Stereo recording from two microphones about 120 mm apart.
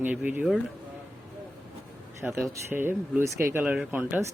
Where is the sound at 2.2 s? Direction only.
20° right (ahead or behind).